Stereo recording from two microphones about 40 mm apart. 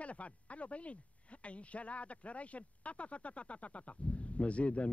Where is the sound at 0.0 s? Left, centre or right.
Left.